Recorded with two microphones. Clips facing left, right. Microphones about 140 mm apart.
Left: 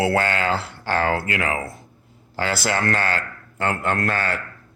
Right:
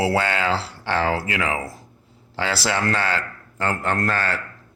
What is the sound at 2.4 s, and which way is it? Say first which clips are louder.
Speech: even; 30° right (ahead or behind).